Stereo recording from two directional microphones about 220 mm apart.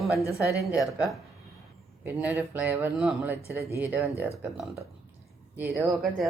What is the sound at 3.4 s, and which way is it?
Speech, 45° right (ahead or behind).